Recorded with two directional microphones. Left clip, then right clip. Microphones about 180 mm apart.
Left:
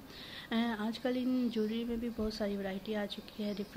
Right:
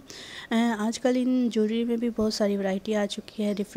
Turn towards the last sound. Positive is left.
turn(degrees=-50)  # may be behind; listen again after turning